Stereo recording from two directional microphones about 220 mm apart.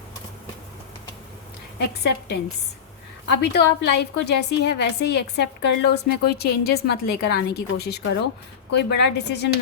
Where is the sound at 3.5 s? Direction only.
50° left (ahead or behind).